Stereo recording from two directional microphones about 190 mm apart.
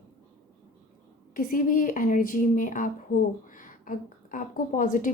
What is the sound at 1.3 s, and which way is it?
A woman's voice, 45° left (ahead or behind).